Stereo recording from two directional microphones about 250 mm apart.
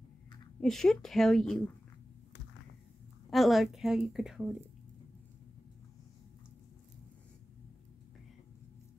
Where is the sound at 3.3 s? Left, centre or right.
Centre.